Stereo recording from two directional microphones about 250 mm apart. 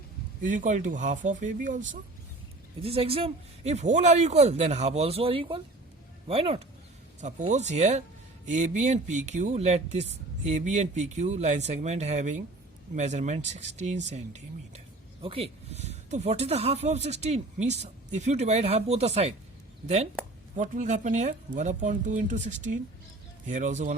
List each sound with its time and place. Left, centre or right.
0.4 s speech: right
20.6 s speech: right